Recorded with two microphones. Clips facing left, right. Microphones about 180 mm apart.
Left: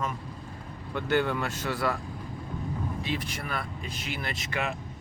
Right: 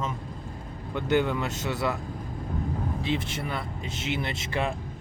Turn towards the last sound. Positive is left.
turn(degrees=-30)  # may be behind; listen again after turning